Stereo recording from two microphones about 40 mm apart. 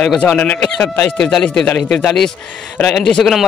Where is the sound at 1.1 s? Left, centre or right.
Centre.